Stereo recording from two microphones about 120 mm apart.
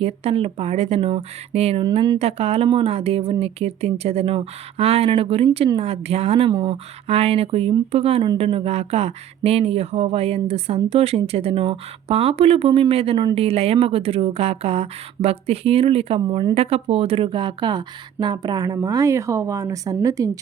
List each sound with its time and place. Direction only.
0.0 s speech: 55° right (ahead or behind)
6.5 s speech: 35° right (ahead or behind)
7.1 s speech: 55° right (ahead or behind); by 20.4 s 30° right (ahead or behind)